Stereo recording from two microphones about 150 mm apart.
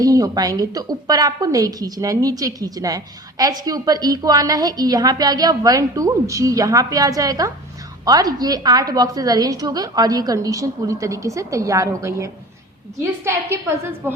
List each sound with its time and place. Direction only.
0.0 s a woman's voice: 25° right (ahead or behind)